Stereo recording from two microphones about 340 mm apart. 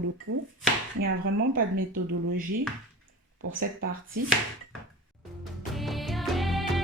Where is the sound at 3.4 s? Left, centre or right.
Right.